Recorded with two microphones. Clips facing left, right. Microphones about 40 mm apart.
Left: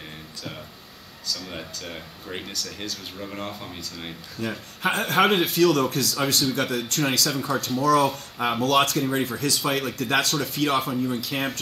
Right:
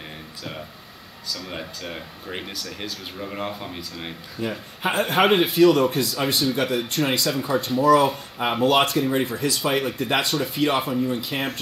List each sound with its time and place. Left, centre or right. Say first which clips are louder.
1.2 s speech: right 1 dB; centre